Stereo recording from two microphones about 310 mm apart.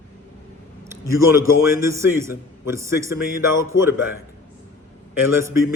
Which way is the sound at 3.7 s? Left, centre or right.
Left.